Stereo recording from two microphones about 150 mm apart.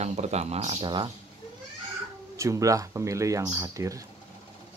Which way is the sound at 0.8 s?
30° right (ahead or behind).